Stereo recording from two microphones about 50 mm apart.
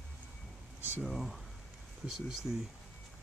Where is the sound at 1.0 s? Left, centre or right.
Centre.